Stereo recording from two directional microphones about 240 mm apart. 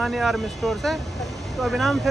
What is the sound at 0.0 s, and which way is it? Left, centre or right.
Speech, centre.